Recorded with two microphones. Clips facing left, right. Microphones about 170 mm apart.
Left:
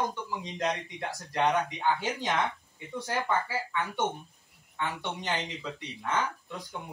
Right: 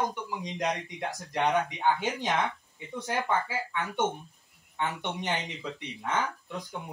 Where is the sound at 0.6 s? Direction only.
20° right (ahead or behind).